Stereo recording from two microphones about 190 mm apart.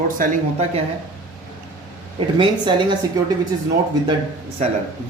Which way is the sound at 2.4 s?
25° right (ahead or behind).